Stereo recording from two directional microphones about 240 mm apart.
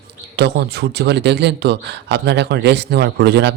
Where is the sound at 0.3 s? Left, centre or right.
Right.